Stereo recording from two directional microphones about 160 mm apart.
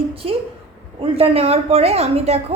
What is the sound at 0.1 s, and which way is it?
A woman's voice, 35° right (ahead or behind).